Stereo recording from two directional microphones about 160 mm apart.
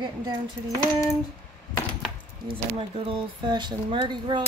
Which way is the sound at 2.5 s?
35° right (ahead or behind).